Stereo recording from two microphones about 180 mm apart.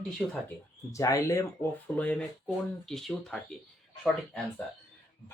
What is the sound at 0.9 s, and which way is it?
Speech, 20° left (ahead or behind).